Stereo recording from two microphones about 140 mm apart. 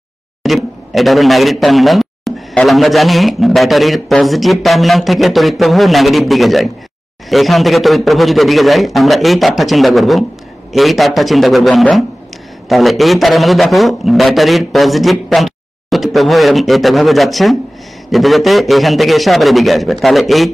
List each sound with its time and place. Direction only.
0.4 s speech: centre (ahead or behind)